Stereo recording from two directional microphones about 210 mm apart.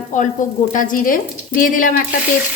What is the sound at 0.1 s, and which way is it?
Sizzle, 35° left (ahead or behind).